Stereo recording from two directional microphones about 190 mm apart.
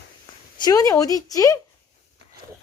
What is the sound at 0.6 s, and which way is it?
Speech, 20° left (ahead or behind).